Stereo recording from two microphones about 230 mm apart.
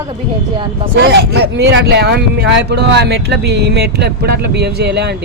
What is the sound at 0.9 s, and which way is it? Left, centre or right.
Speech, right.